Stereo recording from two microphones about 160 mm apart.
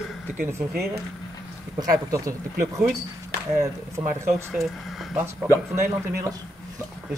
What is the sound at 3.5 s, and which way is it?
Speech, 15° right (ahead or behind).